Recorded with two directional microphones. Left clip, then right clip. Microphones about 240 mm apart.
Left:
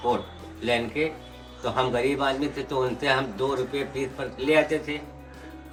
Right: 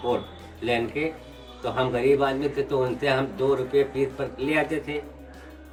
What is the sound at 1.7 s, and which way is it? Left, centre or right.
Speech, centre.